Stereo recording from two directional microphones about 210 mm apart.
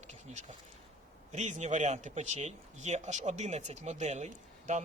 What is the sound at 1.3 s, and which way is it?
Speech, 35° right (ahead or behind).